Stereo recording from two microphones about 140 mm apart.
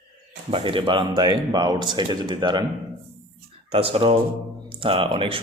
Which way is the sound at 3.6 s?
45° right (ahead or behind).